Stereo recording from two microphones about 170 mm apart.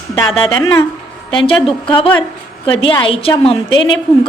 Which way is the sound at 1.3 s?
30° left (ahead or behind).